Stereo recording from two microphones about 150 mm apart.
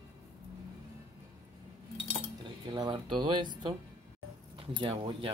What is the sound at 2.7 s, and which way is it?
Speech, 30° right (ahead or behind).